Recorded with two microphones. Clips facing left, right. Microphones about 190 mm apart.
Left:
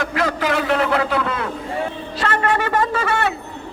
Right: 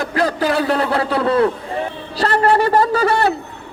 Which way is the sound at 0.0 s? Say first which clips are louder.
Right 3 dB; 35° right (ahead or behind).